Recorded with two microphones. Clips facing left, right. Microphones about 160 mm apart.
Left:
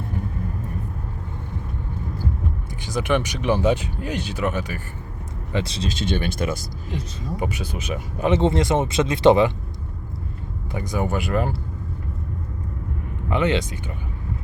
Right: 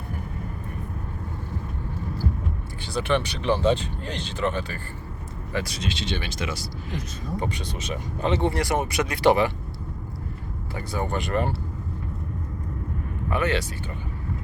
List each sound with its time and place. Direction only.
2.8 s speech: 15° left (ahead or behind)
5.5 s speech: 25° left (ahead or behind)
5.9 s speech: 50° left (ahead or behind)
7.3 s speech: 10° left (ahead or behind)
8.3 s speech: 20° left (ahead or behind)
10.8 s speech: 10° left (ahead or behind)
13.3 s speech: 20° left (ahead or behind)